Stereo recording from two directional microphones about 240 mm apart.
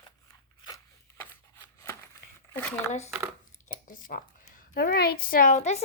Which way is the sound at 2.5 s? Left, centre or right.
Centre.